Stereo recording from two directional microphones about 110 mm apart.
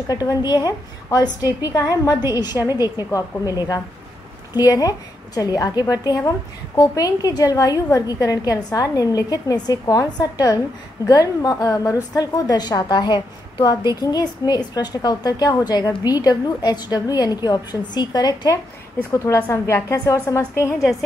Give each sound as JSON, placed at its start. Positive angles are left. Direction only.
{"t": 0.1, "sound": "a woman's voice", "side_deg": 35}
{"t": 19.1, "sound": "a woman's voice", "side_deg": 25}